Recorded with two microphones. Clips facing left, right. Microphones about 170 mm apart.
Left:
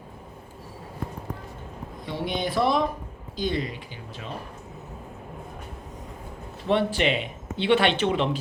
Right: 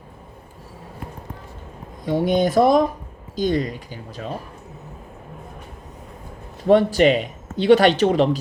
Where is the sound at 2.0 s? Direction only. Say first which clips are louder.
Right 10 dB; 45° right (ahead or behind).